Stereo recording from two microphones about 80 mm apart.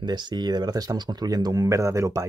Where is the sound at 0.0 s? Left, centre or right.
Right.